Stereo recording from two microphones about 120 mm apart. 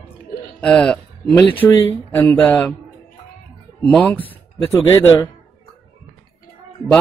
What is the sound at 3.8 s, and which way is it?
Speech, 5° left (ahead or behind).